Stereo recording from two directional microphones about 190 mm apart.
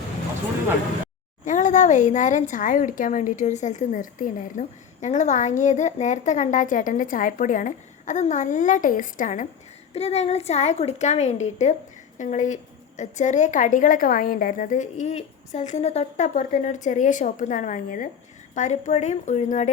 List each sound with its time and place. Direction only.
1.5 s a woman's voice: 40° left (ahead or behind)